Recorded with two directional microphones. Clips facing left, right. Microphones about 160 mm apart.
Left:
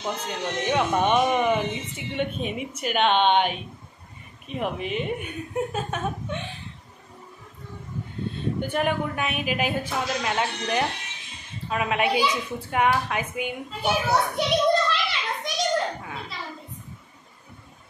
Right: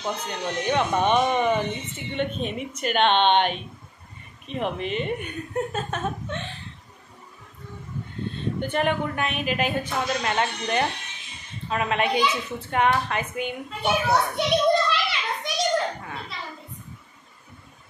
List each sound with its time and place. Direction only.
0.3 s speech: 5° left (ahead or behind)
8.5 s a child's voice: 5° left (ahead or behind)